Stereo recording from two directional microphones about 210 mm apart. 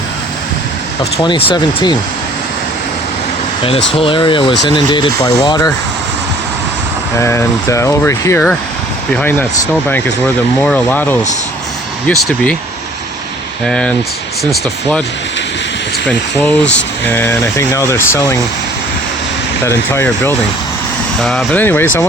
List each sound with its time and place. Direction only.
1.1 s speech: 25° left (ahead or behind)
4.0 s speech: 25° left (ahead or behind)
7.2 s speech: 15° left (ahead or behind)
10.6 s speech: 5° left (ahead or behind)
13.7 s speech: 5° left (ahead or behind)
16.0 s speech: 5° left (ahead or behind)
19.6 s speech: 10° left (ahead or behind)